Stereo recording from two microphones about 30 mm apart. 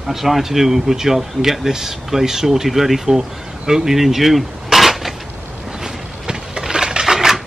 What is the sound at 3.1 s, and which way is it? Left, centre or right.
Speech, centre.